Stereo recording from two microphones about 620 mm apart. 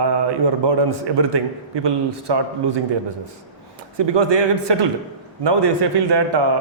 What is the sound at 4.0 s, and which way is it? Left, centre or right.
A man's voice, right.